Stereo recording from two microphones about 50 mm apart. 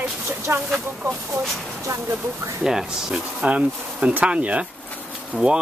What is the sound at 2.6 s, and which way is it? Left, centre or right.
Speech, centre.